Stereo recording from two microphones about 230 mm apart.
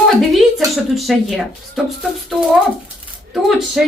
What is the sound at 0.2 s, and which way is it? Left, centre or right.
A woman's voice, centre.